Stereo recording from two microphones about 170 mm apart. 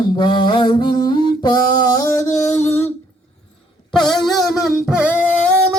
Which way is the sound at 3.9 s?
Centre (ahead or behind).